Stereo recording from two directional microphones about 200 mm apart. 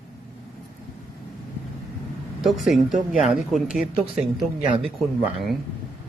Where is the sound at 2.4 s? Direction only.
Centre (ahead or behind).